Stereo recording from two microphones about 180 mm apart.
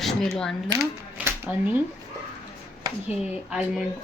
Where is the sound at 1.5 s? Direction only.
10° right (ahead or behind).